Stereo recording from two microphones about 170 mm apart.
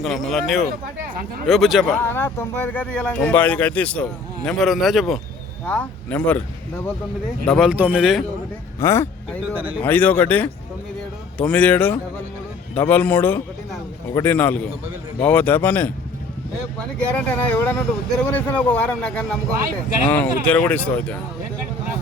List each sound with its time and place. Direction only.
0.0 s speech: centre (ahead or behind)
2.0 s speech: 10° left (ahead or behind)
7.4 s speech: centre (ahead or behind)
8.8 s speech: 15° left (ahead or behind)